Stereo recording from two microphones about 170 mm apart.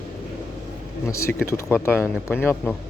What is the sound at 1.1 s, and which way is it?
Speech, 15° left (ahead or behind).